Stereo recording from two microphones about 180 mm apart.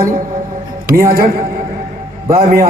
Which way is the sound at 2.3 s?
55° right (ahead or behind).